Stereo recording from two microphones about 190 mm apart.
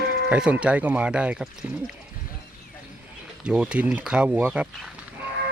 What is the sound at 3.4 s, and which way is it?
Speech, 5° right (ahead or behind).